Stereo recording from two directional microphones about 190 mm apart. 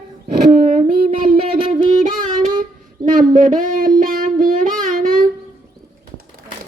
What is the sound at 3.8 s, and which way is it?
Child singing, 50° right (ahead or behind).